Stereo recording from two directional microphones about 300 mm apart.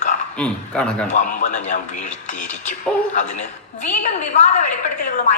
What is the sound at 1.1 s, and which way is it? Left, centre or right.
Speech, left.